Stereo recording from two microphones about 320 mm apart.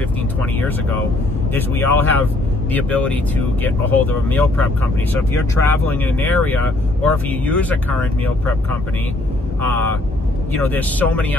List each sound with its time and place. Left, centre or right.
0.4 s speech: centre
9.6 s speech: centre